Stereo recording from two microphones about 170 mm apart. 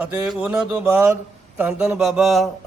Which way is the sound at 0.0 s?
10° right (ahead or behind).